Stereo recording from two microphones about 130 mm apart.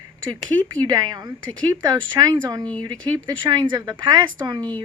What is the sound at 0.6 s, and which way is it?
Speech, 30° right (ahead or behind).